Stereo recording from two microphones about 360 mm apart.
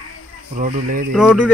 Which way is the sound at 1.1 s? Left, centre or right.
Centre.